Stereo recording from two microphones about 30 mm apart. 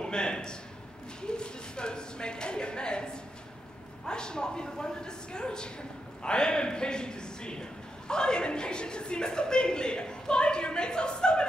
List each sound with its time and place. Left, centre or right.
0.0 s a man's voice: left